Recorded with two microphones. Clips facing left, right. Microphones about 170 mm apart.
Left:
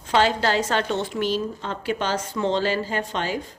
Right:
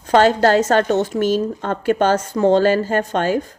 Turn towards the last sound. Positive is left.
turn(degrees=-50)  # may be behind; listen again after turning